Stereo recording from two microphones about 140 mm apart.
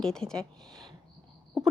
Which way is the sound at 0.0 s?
5° left (ahead or behind).